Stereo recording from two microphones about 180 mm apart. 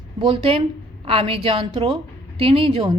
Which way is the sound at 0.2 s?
30° right (ahead or behind).